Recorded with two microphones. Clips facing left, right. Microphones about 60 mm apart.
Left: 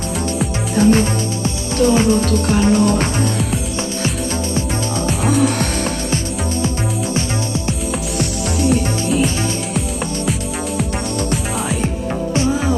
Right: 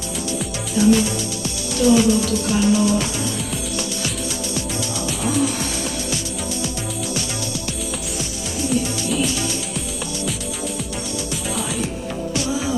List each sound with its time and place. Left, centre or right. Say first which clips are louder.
0.4 s music: left 4 dB; left
5.2 s music: left 5 dB; left
8.2 s music: left 8 dB; left